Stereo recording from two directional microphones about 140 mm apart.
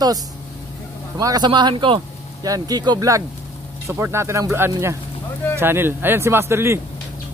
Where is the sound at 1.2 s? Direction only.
25° right (ahead or behind).